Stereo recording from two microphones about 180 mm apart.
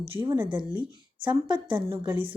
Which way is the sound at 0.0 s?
25° right (ahead or behind).